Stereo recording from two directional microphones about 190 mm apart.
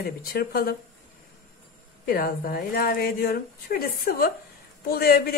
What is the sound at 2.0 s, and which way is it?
Speech, 50° left (ahead or behind).